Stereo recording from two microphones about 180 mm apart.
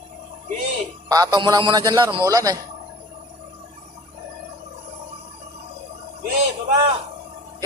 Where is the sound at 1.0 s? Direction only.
20° right (ahead or behind).